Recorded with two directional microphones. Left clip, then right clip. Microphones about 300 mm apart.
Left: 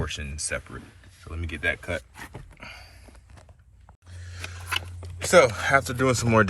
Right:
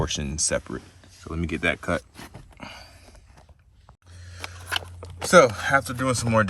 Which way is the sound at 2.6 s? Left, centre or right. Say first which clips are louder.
Right 3 dB; centre.